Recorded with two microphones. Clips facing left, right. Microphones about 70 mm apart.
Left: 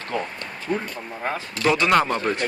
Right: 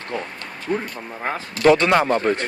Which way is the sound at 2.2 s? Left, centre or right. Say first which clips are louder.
Right 3 dB; right.